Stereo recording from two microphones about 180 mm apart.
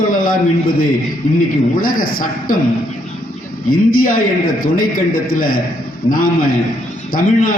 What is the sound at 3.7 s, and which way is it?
A man's voice, 55° left (ahead or behind).